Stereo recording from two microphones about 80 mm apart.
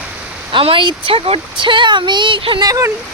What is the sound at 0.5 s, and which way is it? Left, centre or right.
Speech, right.